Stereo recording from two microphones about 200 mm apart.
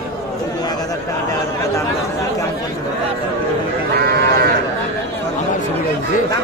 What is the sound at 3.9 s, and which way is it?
Livestock, 55° right (ahead or behind).